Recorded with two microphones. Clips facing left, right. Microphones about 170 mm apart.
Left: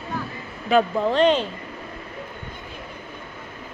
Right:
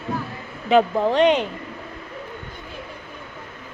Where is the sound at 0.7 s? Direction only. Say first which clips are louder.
Right 2 dB; 15° right (ahead or behind).